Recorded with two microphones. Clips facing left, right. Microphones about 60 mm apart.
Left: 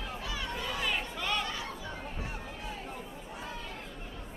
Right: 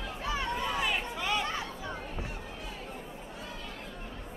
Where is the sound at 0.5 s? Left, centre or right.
Right.